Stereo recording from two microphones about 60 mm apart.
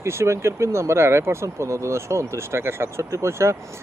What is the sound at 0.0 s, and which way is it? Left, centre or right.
Speech, right.